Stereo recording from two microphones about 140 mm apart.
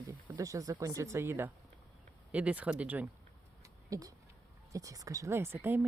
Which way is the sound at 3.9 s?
25° right (ahead or behind).